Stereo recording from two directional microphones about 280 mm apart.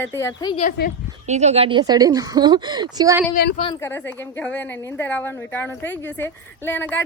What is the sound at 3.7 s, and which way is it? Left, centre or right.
A woman's voice, centre.